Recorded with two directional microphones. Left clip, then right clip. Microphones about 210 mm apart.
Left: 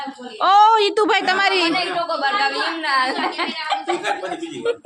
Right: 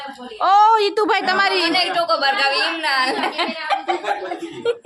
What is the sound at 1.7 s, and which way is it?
A woman's voice, 65° right (ahead or behind).